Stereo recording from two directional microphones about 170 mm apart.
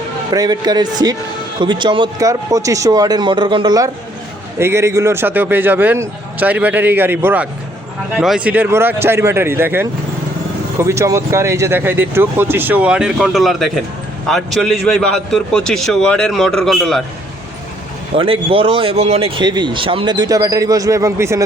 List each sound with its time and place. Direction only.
0.3 s a man's voice: 25° right (ahead or behind); by 17.0 s centre (ahead or behind)
18.2 s speech: 30° right (ahead or behind)